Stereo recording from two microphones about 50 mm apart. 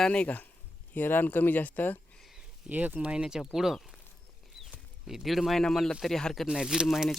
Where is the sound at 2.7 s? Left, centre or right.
Right.